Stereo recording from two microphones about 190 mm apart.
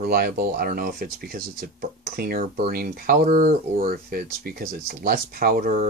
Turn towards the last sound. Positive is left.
turn(degrees=-50)  # may be behind; listen again after turning